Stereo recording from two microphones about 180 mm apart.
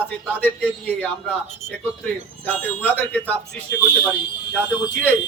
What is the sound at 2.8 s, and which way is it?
Speech, 10° left (ahead or behind).